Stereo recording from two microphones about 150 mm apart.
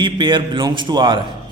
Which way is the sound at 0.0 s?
30° right (ahead or behind).